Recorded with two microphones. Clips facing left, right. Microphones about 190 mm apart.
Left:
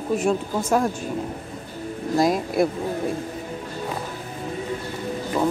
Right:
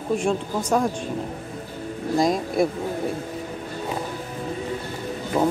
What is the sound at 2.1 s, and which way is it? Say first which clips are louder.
Speech: left 1 dB; centre (ahead or behind).